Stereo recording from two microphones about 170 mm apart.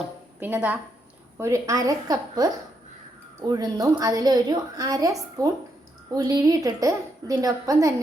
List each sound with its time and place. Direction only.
0.3 s a woman's voice: 10° right (ahead or behind)